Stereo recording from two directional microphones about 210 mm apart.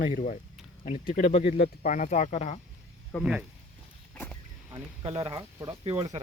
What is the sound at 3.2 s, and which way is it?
Speech, 5° right (ahead or behind).